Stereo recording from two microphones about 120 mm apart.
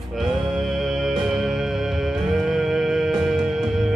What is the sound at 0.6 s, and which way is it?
Music, centre (ahead or behind).